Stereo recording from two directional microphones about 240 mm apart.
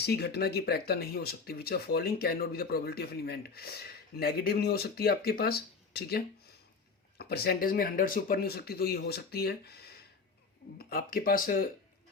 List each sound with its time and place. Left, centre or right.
0.0 s speech: left